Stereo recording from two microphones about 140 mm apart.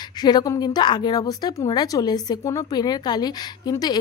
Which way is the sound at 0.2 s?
30° left (ahead or behind).